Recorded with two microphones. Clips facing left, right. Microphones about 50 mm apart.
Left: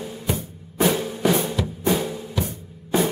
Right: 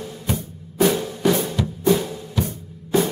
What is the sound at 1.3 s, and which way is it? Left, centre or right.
Drum, centre.